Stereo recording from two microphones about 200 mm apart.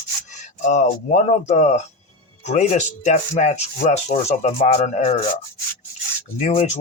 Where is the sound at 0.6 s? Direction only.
35° left (ahead or behind).